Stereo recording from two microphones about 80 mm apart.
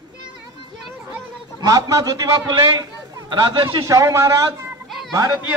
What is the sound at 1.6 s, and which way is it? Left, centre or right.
Speech, right.